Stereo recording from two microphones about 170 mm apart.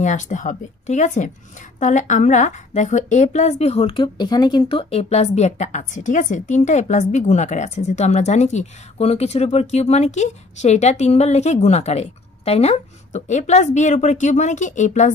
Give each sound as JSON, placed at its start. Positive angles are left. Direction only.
{"t": 0.0, "sound": "speech", "side_deg": 45}